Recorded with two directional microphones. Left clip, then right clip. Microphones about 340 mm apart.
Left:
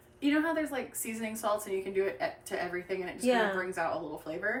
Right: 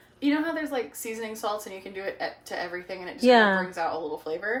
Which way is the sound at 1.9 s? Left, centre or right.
Centre.